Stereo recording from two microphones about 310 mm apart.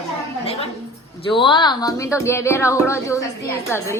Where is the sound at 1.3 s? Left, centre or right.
Centre.